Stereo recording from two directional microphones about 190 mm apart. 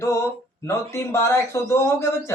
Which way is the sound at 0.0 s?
15° left (ahead or behind).